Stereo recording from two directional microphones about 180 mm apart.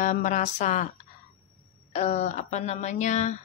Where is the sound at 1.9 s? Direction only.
40° left (ahead or behind).